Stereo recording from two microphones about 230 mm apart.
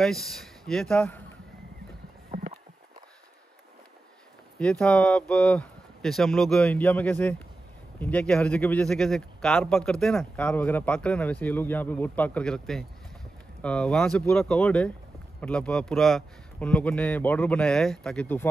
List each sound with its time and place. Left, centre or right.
0.0 s speech: centre
2.3 s clip-clop: right
4.6 s speech: centre